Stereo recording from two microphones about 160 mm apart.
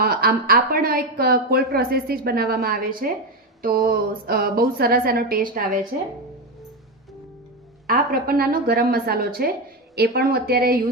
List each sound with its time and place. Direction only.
0.0 s a woman's voice: 70° right (ahead or behind)
7.9 s a woman's voice: 65° right (ahead or behind)